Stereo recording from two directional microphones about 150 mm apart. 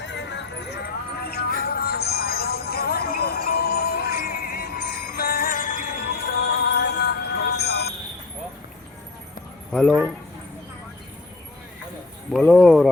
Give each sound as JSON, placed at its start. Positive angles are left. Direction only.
{"t": 1.2, "sound": "music", "side_deg": 90}
{"t": 9.7, "sound": "speech", "side_deg": 5}
{"t": 12.3, "sound": "speech", "side_deg": 0}